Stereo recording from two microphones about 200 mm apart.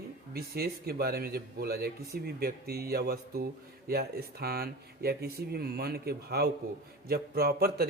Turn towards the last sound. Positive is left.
turn(degrees=-50)  # may be behind; listen again after turning